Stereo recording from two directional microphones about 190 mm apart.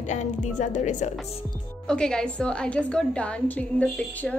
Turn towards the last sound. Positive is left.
turn(degrees=5)  # may be behind; listen again after turning